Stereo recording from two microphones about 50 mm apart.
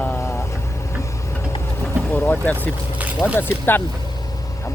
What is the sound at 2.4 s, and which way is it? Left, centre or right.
Speech, left.